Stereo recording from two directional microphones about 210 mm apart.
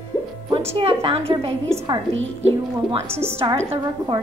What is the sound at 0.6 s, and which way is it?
Speech, 25° right (ahead or behind).